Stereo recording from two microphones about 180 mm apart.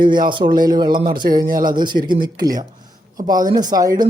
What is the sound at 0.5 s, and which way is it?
Speech, 25° right (ahead or behind).